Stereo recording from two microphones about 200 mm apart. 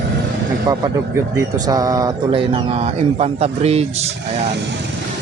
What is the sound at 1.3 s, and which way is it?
Speech, 20° right (ahead or behind).